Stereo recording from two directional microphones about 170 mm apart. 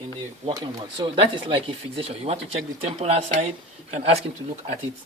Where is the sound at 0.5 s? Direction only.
30° right (ahead or behind).